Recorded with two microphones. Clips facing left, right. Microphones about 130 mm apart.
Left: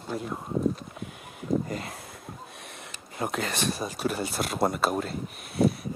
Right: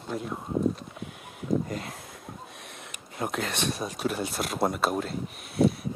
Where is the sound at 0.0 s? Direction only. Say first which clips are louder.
Even; centre (ahead or behind).